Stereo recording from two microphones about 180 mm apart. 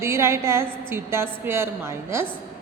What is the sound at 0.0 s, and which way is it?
A woman's voice, 15° right (ahead or behind).